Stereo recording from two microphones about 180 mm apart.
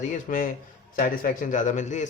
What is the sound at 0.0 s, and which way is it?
A man's voice, 45° left (ahead or behind).